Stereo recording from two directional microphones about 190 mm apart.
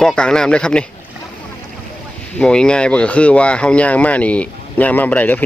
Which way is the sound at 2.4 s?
5° left (ahead or behind).